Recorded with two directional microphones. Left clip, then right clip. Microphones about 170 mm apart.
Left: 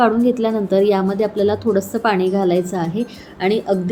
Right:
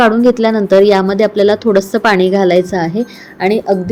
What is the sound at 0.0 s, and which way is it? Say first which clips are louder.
A woman's voice: right 6 dB; 30° right (ahead or behind).